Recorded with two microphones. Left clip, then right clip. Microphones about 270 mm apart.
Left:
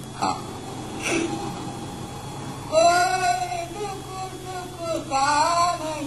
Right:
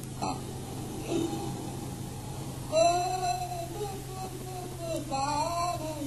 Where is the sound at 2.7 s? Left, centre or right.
Left.